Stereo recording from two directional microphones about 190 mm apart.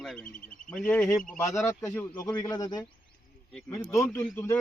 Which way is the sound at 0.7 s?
5° left (ahead or behind).